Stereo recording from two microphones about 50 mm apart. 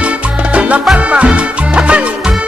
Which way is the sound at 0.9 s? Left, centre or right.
Right.